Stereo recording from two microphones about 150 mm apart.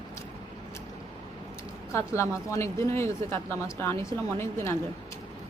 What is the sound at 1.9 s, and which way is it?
A woman's voice, 20° left (ahead or behind).